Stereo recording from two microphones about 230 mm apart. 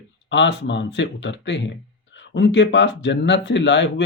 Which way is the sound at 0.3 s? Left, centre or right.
Left.